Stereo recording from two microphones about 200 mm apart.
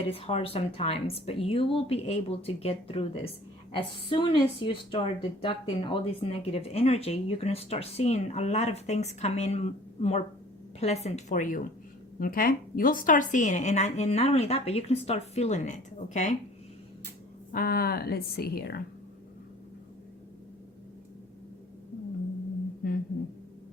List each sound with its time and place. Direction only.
0.0 s a woman's voice: 30° left (ahead or behind)
17.5 s speech: 50° left (ahead or behind)